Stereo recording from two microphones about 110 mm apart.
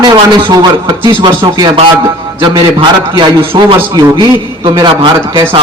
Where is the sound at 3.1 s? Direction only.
50° right (ahead or behind).